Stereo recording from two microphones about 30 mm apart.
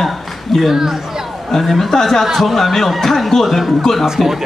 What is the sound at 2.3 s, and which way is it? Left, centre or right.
Speech, centre.